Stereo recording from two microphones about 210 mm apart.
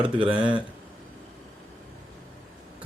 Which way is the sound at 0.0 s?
25° right (ahead or behind).